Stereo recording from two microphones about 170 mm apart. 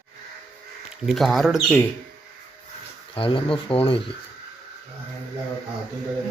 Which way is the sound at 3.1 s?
30° left (ahead or behind).